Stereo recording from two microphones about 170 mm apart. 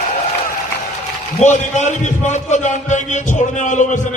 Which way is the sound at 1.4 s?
45° left (ahead or behind).